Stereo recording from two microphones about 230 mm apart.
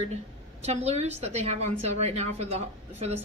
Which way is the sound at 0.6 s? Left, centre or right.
Right.